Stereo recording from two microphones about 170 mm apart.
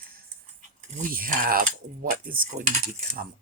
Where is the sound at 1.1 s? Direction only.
55° right (ahead or behind).